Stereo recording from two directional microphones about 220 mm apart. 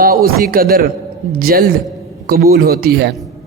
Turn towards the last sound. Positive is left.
turn(degrees=-45)  # may be behind; listen again after turning